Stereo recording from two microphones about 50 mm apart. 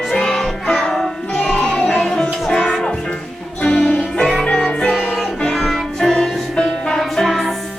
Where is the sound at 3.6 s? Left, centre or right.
Left.